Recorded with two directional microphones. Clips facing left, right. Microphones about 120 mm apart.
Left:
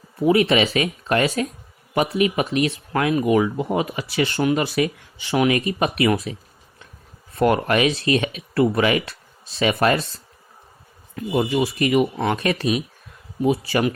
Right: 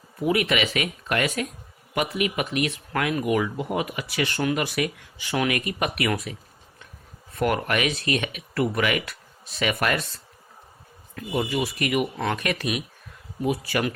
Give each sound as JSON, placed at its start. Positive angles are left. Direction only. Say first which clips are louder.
{"t": 0.2, "sound": "speech", "louder": "left 6 dB", "side_deg": 30}
{"t": 7.3, "sound": "speech", "louder": "left 6 dB", "side_deg": 30}
{"t": 11.3, "sound": "speech", "louder": "left 5 dB", "side_deg": 30}